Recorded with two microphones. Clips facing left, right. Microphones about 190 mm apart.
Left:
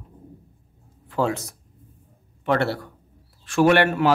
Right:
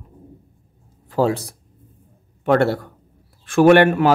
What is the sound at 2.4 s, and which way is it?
A man's voice, 45° right (ahead or behind).